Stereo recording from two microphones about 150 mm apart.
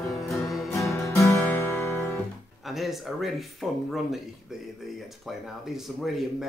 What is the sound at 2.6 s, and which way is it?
Speech, centre (ahead or behind).